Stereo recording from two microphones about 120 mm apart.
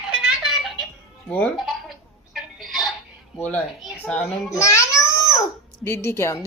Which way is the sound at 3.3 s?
10° left (ahead or behind).